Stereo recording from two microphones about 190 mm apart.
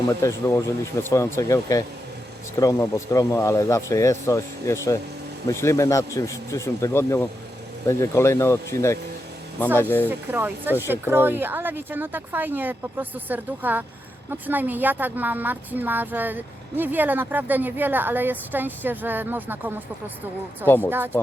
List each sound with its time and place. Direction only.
0.1 s speech: 15° left (ahead or behind)
10.1 s a woman's voice: 10° right (ahead or behind)
20.7 s speech: 10° left (ahead or behind)